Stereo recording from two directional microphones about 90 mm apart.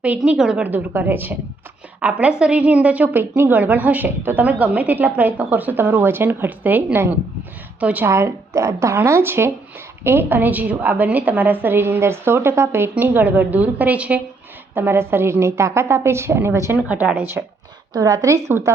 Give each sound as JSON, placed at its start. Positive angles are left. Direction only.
{"t": 0.2, "sound": "a woman's voice", "side_deg": -5}
{"t": 8.0, "sound": "a woman's voice", "side_deg": -30}
{"t": 14.8, "sound": "a woman's voice", "side_deg": -25}
{"t": 16.7, "sound": "a woman's voice", "side_deg": -15}
{"t": 17.9, "sound": "a woman's voice", "side_deg": -45}